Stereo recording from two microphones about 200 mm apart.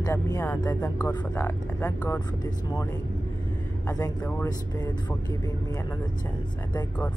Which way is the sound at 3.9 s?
20° left (ahead or behind).